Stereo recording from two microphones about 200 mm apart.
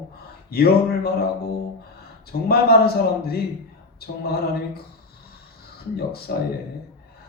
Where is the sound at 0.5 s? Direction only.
50° left (ahead or behind).